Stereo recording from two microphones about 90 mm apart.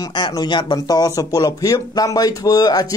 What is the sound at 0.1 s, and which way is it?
Speech, 60° left (ahead or behind).